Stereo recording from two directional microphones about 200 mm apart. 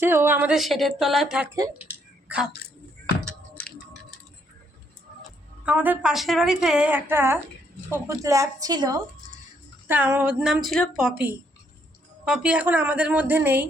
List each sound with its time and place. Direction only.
0.0 s a woman's voice: 10° right (ahead or behind)
2.2 s a sound: 5° right (ahead or behind)
5.6 s a woman's voice: 10° right (ahead or behind)